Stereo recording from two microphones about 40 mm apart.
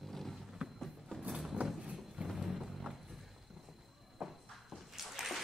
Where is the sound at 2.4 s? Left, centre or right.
Centre.